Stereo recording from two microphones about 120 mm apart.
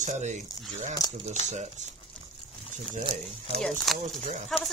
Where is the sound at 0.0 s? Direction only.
85° right.